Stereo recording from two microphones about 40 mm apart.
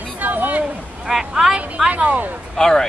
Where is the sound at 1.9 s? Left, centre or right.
Right.